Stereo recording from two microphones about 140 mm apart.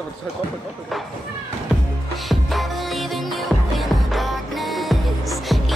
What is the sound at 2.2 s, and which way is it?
Music, centre (ahead or behind).